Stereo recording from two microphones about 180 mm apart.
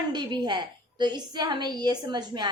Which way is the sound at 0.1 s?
25° right (ahead or behind).